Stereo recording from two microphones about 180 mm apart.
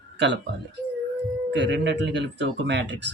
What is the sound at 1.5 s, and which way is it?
Speech, 75° right (ahead or behind).